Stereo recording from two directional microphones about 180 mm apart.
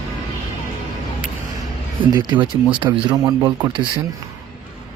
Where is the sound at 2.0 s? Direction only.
25° right (ahead or behind).